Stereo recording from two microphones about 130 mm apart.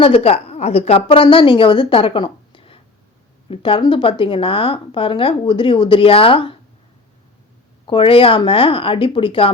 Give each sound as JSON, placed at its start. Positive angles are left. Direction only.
{"t": 0.0, "sound": "a woman's voice", "side_deg": 45}
{"t": 7.9, "sound": "a woman's voice", "side_deg": 45}